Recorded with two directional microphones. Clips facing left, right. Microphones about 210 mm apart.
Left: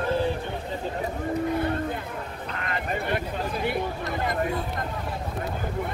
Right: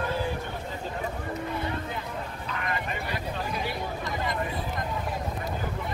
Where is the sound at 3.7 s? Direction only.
55° left (ahead or behind).